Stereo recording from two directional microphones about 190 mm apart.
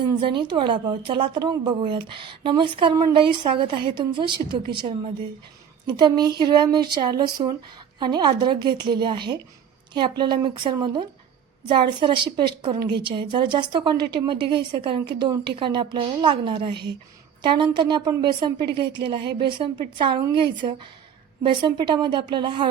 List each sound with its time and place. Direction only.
0.0 s speech: 25° right (ahead or behind)